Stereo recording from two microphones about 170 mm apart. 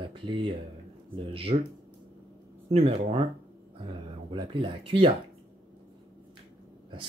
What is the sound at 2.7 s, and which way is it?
Speech, 35° right (ahead or behind).